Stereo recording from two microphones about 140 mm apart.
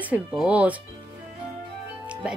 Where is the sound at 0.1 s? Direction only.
10° right (ahead or behind).